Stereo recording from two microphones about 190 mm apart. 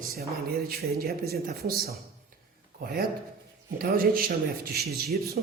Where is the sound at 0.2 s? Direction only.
55° right (ahead or behind).